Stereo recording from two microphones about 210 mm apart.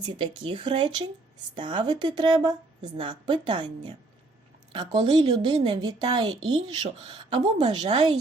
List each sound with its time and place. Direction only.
0.0 s speech: 20° right (ahead or behind)